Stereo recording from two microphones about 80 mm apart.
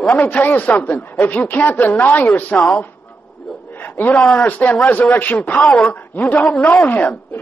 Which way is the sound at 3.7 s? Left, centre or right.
Left.